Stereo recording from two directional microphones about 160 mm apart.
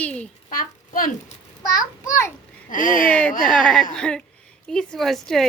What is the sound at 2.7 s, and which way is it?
Speech, 60° left (ahead or behind).